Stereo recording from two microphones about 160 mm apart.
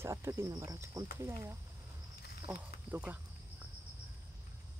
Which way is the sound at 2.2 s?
80° left.